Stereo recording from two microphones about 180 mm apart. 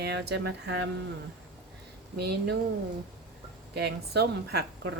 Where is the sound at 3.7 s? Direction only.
65° right (ahead or behind).